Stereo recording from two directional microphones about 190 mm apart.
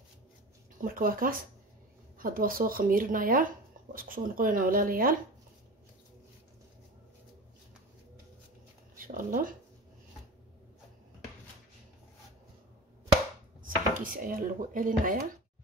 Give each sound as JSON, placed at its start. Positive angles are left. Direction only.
{"t": 0.8, "sound": "speech", "side_deg": -50}
{"t": 8.9, "sound": "speech", "side_deg": -45}
{"t": 13.6, "sound": "speech", "side_deg": -45}